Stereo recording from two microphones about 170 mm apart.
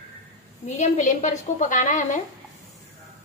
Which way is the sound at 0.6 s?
45° left (ahead or behind).